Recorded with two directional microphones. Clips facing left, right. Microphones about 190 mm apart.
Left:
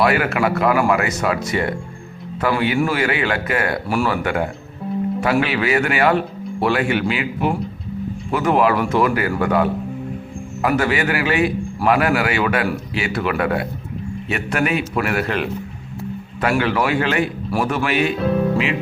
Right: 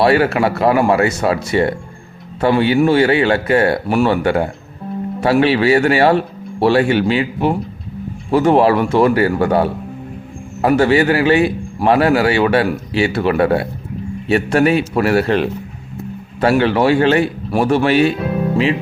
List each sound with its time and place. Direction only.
0.0 s a man's voice: 30° right (ahead or behind)
18.5 s music: 30° right (ahead or behind)